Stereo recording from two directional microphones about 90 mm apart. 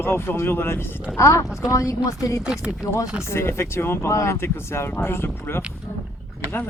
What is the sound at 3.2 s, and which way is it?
Speech, 30° left (ahead or behind).